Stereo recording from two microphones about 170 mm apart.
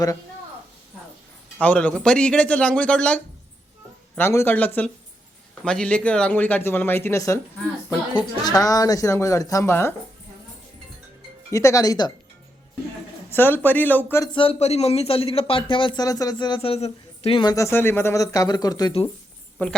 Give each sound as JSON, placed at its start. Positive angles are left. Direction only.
{"t": 1.5, "sound": "a woman's voice", "side_deg": 10}
{"t": 11.5, "sound": "a woman's voice", "side_deg": 20}
{"t": 13.3, "sound": "speech", "side_deg": 10}
{"t": 14.3, "sound": "a man's voice", "side_deg": 35}
{"t": 17.5, "sound": "a woman's voice", "side_deg": 15}
{"t": 19.6, "sound": "speech", "side_deg": 10}